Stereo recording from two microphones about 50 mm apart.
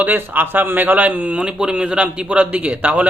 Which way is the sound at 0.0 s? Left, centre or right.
Right.